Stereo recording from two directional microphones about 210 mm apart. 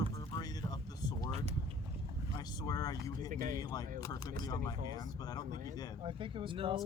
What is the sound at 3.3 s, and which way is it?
Speech, 40° right (ahead or behind).